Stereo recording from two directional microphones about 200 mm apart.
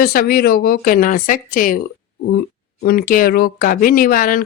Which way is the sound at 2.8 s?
45° left (ahead or behind).